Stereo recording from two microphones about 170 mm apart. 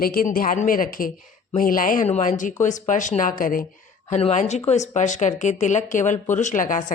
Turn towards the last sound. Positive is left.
turn(degrees=50)  # may be behind; listen again after turning